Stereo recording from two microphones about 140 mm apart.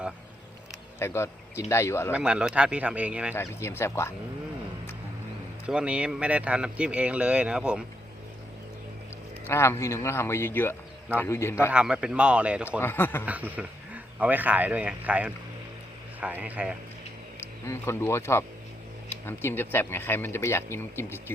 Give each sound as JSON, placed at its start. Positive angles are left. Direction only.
{"t": 0.9, "sound": "speech", "side_deg": 20}
{"t": 2.1, "sound": "speech", "side_deg": -5}
{"t": 3.3, "sound": "speech", "side_deg": 20}
{"t": 5.6, "sound": "speech", "side_deg": -10}
{"t": 9.5, "sound": "speech", "side_deg": 20}
{"t": 11.7, "sound": "speech", "side_deg": -5}
{"t": 12.8, "sound": "speech", "side_deg": 15}
{"t": 13.2, "sound": "a man's voice", "side_deg": -10}
{"t": 17.4, "sound": "speech", "side_deg": 15}